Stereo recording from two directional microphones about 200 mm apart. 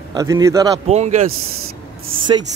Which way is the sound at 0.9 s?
35° right (ahead or behind).